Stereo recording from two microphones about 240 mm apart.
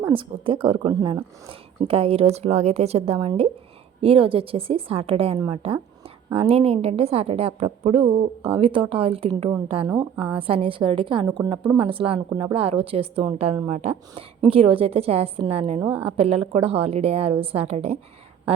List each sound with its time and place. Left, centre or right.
0.0 s a woman's voice: right
15.8 s a woman's voice: centre
16.0 s a woman's voice: right